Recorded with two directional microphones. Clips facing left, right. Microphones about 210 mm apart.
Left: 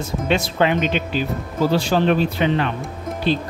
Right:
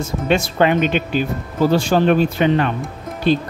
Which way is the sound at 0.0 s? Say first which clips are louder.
Right 2 dB; 50° right (ahead or behind).